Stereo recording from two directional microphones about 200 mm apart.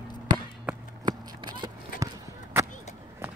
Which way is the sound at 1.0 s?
20° right (ahead or behind).